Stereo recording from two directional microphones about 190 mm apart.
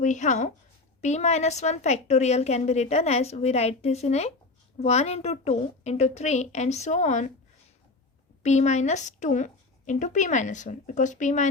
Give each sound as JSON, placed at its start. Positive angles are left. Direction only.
{"t": 0.0, "sound": "a woman's voice", "side_deg": 40}
{"t": 8.4, "sound": "a woman's voice", "side_deg": 35}